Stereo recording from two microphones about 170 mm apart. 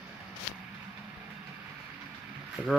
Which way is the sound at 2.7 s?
Centre (ahead or behind).